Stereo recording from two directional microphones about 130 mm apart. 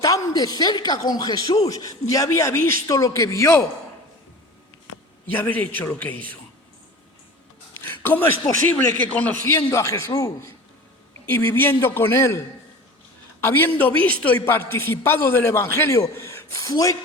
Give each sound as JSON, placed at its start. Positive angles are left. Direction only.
{"t": 0.0, "sound": "speech", "side_deg": 25}
{"t": 5.3, "sound": "a man's voice", "side_deg": 15}
{"t": 7.7, "sound": "a sound", "side_deg": 15}
{"t": 9.0, "sound": "a man's voice", "side_deg": 10}
{"t": 13.4, "sound": "a man's voice", "side_deg": 15}